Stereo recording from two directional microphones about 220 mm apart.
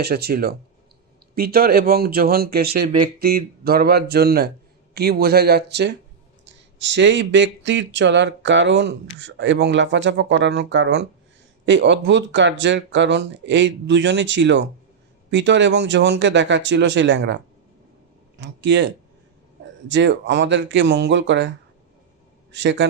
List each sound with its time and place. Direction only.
0.0 s speech: 45° right (ahead or behind)
19.9 s speech: 55° right (ahead or behind)
22.5 s speech: 55° right (ahead or behind)